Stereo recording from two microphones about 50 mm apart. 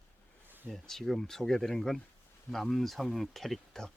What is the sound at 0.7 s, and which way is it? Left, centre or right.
Speech, centre.